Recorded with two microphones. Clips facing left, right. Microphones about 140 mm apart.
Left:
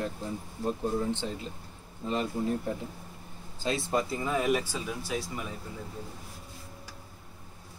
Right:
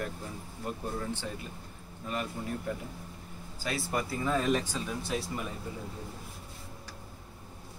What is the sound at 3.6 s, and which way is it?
Speech, 25° left (ahead or behind).